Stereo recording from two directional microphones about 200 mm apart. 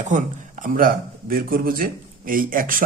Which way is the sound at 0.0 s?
35° right (ahead or behind).